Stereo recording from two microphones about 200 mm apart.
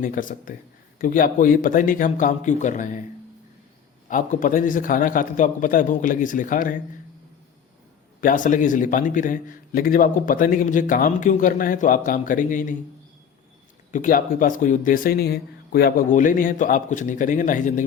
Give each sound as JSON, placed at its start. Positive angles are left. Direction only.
{"t": 0.0, "sound": "a man's voice", "side_deg": 40}
{"t": 4.1, "sound": "a man's voice", "side_deg": 40}
{"t": 8.2, "sound": "a man's voice", "side_deg": 40}
{"t": 13.9, "sound": "a man's voice", "side_deg": 45}